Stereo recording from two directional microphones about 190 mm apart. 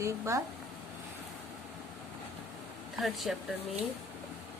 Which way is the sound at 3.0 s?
Centre (ahead or behind).